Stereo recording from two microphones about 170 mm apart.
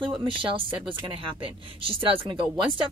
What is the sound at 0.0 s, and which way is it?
Speech, 30° right (ahead or behind).